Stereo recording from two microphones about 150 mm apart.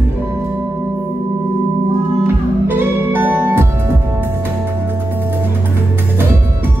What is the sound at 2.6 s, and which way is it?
Music, 15° right (ahead or behind).